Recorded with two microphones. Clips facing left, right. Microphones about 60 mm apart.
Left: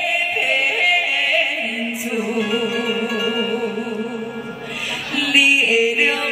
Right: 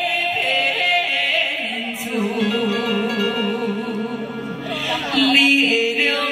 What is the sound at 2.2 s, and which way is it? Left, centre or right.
Music, centre.